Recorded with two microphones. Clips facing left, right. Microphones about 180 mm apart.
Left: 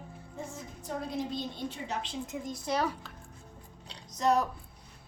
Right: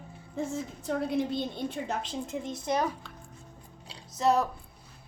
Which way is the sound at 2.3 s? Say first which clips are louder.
Right 3 dB; 25° right (ahead or behind).